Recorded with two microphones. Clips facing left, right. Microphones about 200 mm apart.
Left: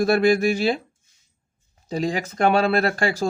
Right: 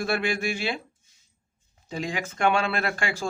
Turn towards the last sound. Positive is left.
turn(degrees=40)  # may be behind; listen again after turning